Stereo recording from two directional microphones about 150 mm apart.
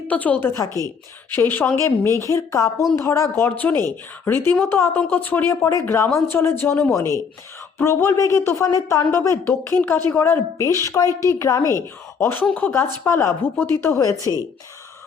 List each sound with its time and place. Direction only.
0.1 s speech: 10° left (ahead or behind)